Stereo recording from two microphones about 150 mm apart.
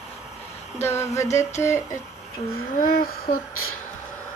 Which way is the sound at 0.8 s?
15° left (ahead or behind).